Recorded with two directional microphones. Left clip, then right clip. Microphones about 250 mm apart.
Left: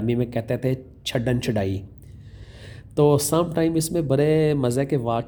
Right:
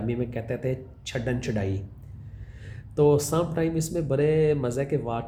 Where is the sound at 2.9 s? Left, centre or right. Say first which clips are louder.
Left 3 dB; left.